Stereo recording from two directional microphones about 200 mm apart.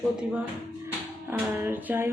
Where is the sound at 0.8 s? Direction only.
10° right (ahead or behind).